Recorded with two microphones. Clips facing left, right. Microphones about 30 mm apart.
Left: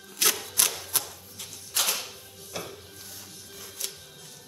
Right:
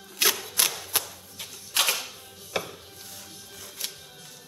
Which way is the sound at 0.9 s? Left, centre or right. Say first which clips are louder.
Right 3 dB; right.